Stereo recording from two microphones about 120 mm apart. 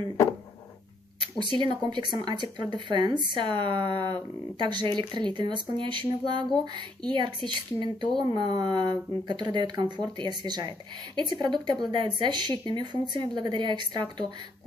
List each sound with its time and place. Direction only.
1.2 s speech: 40° right (ahead or behind)